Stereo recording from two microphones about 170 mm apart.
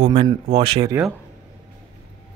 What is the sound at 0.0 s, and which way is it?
Speech, 30° right (ahead or behind).